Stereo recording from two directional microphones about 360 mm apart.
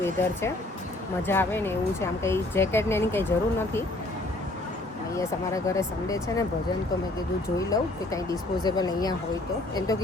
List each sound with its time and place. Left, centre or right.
0.0 s speech: centre
5.1 s speech: centre
7.7 s speech: centre